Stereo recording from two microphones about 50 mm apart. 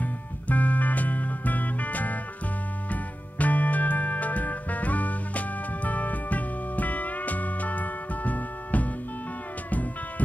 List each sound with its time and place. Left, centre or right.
0.0 s music: left